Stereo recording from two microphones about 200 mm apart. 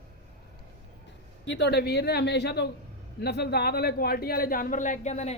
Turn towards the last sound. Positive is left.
turn(degrees=35)  # may be behind; listen again after turning